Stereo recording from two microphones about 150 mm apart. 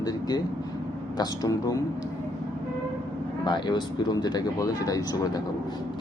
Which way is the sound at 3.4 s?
30° left (ahead or behind).